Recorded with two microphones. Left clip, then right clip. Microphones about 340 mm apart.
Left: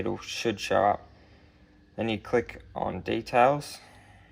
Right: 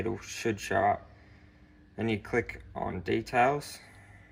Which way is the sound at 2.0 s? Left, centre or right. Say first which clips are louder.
Left 3 dB; left.